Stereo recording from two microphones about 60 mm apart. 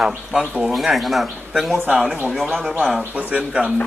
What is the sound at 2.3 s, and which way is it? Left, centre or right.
Speech, centre.